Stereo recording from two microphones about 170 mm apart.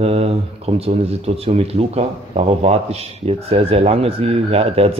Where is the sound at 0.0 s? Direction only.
35° right (ahead or behind).